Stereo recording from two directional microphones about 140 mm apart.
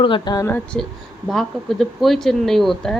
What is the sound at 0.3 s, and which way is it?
Speech, 15° left (ahead or behind).